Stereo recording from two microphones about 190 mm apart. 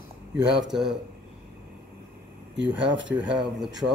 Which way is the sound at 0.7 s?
5° right (ahead or behind).